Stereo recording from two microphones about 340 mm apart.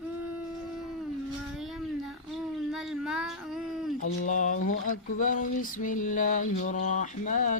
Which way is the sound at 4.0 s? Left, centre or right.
Left.